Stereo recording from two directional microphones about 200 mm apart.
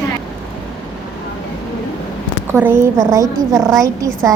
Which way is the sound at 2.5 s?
10° right (ahead or behind).